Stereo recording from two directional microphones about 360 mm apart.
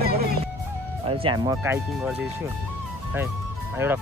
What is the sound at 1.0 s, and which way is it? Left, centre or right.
Speech, centre.